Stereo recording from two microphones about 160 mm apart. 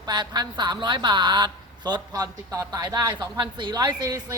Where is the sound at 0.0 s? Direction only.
25° right (ahead or behind).